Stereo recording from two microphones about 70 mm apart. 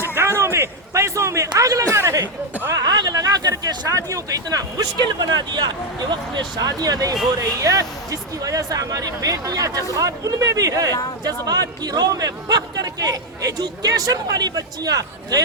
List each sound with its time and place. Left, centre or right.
0.0 s a sound: right
2.0 s speech: right
2.7 s speech: right
5.4 s speech: right
7.3 s speech: right